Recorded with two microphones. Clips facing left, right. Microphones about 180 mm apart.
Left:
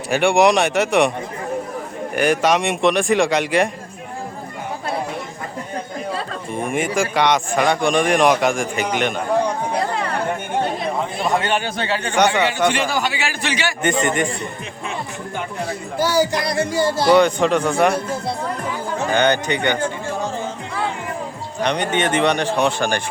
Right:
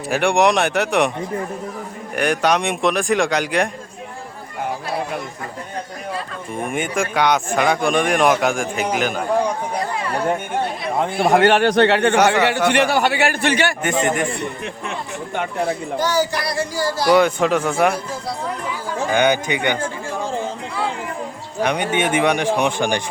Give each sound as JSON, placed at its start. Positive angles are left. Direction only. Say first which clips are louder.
{"t": 0.1, "sound": "speech", "louder": "left 2 dB", "side_deg": 0}
{"t": 2.1, "sound": "speech", "louder": "left 1 dB", "side_deg": 0}
{"t": 6.5, "sound": "speech", "louder": "left 2 dB", "side_deg": 0}
{"t": 11.2, "sound": "speech", "louder": "right 8 dB", "side_deg": -60}
{"t": 12.1, "sound": "speech", "louder": "right 2 dB", "side_deg": 0}
{"t": 12.7, "sound": "a man's voice", "louder": "right 5 dB", "side_deg": -60}
{"t": 13.8, "sound": "speech", "louder": "even", "side_deg": 0}
{"t": 15.4, "sound": "a man's voice", "louder": "right 5 dB", "side_deg": -60}
{"t": 16.0, "sound": "speech", "louder": "left 4 dB", "side_deg": 10}
{"t": 17.1, "sound": "speech", "louder": "even", "side_deg": -5}
{"t": 17.9, "sound": "speech", "louder": "left 3 dB", "side_deg": 25}
{"t": 19.1, "sound": "speech", "louder": "even", "side_deg": -10}
{"t": 21.6, "sound": "speech", "louder": "even", "side_deg": -10}